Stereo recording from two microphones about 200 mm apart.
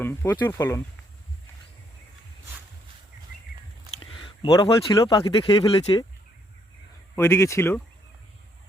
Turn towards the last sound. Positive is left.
turn(degrees=10)  # may be behind; listen again after turning